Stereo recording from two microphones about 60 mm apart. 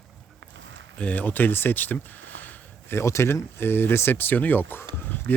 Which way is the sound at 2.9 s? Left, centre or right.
Left.